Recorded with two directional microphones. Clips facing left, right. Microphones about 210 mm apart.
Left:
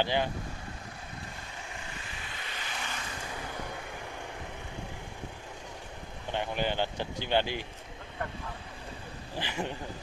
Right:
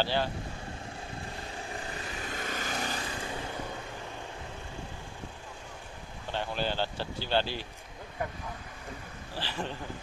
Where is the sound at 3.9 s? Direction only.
15° left (ahead or behind).